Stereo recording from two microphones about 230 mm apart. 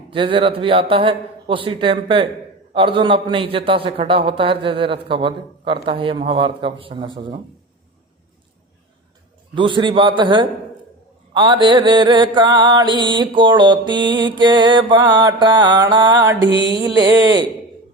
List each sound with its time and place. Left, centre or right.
0.1 s mantra: right
9.6 s mantra: right